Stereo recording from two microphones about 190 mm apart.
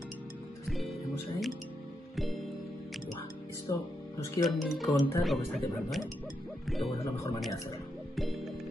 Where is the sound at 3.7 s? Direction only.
20° left (ahead or behind).